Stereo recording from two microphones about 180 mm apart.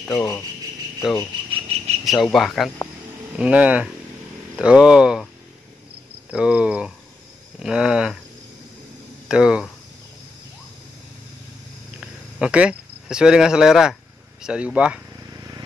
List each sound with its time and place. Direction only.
0.1 s speech: 20° left (ahead or behind)
1.5 s a sound: 35° right (ahead or behind)
2.0 s speech: centre (ahead or behind)
6.3 s speech: 5° right (ahead or behind)
9.3 s speech: 5° right (ahead or behind)
12.0 s cricket: 5° right (ahead or behind)
14.4 s speech: 5° right (ahead or behind)
15.3 s vehicle: 20° right (ahead or behind)